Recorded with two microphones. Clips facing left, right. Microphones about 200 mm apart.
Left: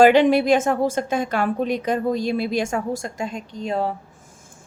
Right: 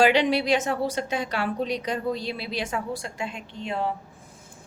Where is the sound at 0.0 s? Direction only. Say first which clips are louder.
Left 7 dB; 50° left (ahead or behind).